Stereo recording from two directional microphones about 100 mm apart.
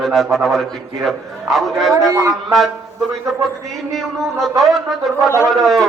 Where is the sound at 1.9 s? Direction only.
30° right (ahead or behind).